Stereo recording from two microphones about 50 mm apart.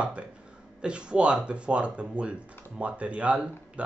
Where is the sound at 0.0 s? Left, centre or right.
Right.